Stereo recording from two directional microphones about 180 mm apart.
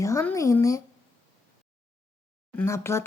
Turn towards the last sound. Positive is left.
turn(degrees=15)  # may be behind; listen again after turning